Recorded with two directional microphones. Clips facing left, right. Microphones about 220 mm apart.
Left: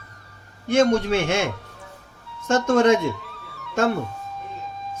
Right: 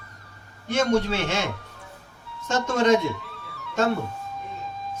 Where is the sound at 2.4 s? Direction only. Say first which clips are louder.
Left 6 dB; 50° left (ahead or behind).